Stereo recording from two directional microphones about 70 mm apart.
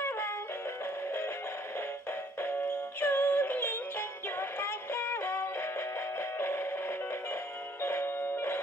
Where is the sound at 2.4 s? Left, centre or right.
Left.